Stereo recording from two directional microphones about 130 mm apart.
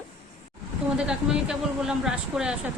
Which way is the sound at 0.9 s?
5° right (ahead or behind).